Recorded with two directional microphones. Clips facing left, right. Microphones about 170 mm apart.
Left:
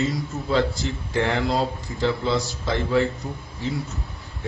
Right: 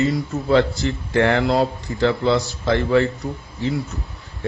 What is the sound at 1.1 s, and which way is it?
Speech, 65° right (ahead or behind).